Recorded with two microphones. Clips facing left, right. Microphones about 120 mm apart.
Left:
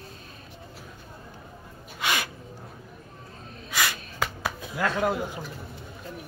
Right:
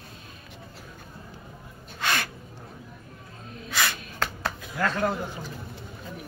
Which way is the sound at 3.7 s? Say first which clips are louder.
Even; 10° left (ahead or behind).